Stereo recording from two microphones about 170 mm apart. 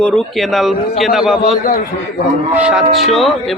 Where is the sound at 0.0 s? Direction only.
Centre (ahead or behind).